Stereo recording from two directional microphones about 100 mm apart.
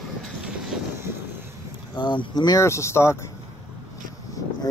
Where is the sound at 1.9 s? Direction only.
45° left (ahead or behind).